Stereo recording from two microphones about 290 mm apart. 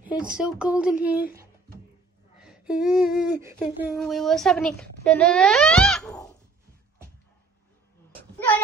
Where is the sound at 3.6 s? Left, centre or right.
Centre.